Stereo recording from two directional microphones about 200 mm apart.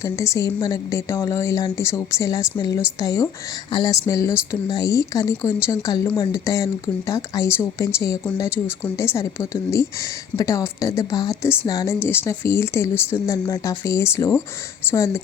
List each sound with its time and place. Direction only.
0.0 s a woman's voice: 15° left (ahead or behind)